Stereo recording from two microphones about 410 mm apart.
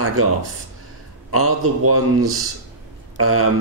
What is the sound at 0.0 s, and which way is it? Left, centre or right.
Speech, right.